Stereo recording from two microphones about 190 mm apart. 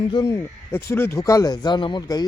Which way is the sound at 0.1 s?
15° left (ahead or behind).